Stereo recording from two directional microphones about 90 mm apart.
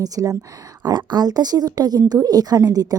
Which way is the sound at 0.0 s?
45° right (ahead or behind).